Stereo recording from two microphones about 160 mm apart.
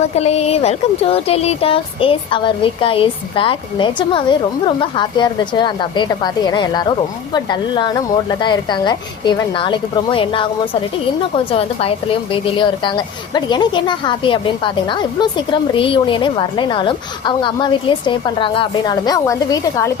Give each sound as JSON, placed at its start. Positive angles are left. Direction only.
{"t": 0.2, "sound": "a woman's voice", "side_deg": 40}
{"t": 11.5, "sound": "a woman's voice", "side_deg": 35}